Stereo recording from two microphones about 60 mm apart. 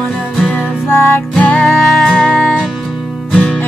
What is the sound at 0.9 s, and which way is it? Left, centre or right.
Music, left.